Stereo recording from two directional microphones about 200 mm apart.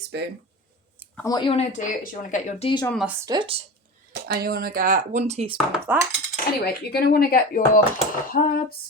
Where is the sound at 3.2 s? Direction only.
20° right (ahead or behind).